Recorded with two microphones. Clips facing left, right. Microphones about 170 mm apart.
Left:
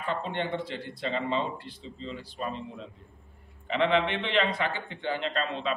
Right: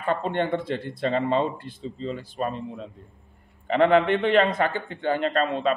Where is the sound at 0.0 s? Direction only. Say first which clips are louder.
Right 6 dB; 50° right (ahead or behind).